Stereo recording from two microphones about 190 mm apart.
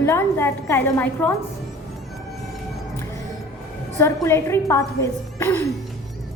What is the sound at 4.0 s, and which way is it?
A woman's voice, 15° left (ahead or behind).